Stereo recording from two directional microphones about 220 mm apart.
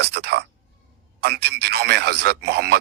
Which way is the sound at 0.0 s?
50° right (ahead or behind).